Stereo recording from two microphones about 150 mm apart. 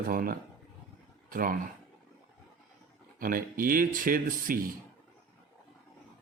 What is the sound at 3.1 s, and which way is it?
Speech, 70° right (ahead or behind).